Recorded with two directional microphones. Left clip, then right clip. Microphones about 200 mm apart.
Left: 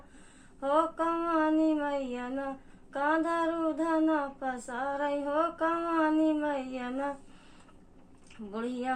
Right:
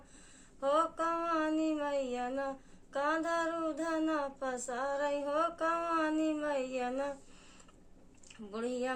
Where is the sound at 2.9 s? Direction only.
45° right (ahead or behind).